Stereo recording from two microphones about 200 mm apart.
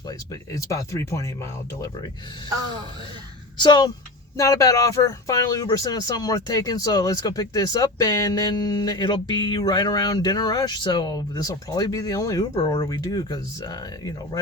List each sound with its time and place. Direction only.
0.5 s speech: 15° left (ahead or behind)
3.6 s speech: 20° left (ahead or behind)